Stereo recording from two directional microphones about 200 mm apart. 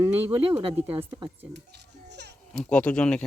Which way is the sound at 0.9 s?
20° right (ahead or behind).